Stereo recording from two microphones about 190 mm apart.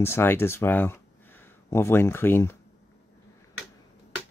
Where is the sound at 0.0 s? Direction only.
10° left (ahead or behind).